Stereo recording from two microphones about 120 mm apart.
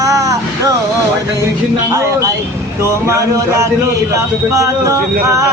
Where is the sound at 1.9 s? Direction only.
25° right (ahead or behind).